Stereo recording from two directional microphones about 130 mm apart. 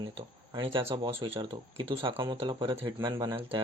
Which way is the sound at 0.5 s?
40° right (ahead or behind).